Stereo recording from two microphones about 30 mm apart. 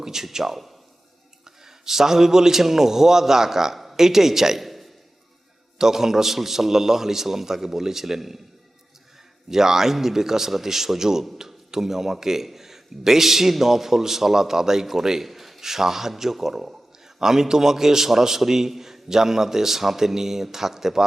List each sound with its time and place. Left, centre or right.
0.0 s a man's voice: centre
1.5 s a man's voice: centre
4.6 s a sound: centre
5.8 s a man's voice: centre
9.5 s a man's voice: centre